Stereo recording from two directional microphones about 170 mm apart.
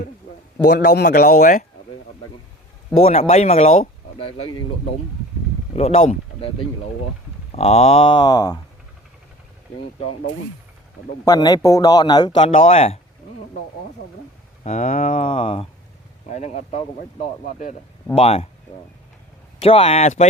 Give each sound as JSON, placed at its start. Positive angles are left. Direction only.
{"t": 0.7, "sound": "a man's voice", "side_deg": 70}
{"t": 3.0, "sound": "speech", "side_deg": 40}
{"t": 5.7, "sound": "speech", "side_deg": 35}
{"t": 7.5, "sound": "speech", "side_deg": 35}
{"t": 11.3, "sound": "speech", "side_deg": 25}
{"t": 14.6, "sound": "speech", "side_deg": 45}
{"t": 15.3, "sound": "speech", "side_deg": 30}
{"t": 16.3, "sound": "speech", "side_deg": 45}
{"t": 19.6, "sound": "speech", "side_deg": 35}